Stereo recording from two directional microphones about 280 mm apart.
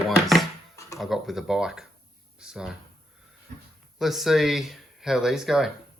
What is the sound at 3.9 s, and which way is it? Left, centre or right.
Speech, centre.